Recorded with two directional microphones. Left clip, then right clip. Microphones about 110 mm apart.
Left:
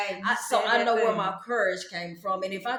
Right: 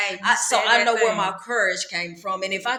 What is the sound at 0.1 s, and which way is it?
A woman's voice, 20° right (ahead or behind).